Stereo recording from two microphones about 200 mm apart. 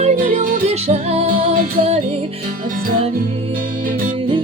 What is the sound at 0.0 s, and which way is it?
Music, 40° right (ahead or behind).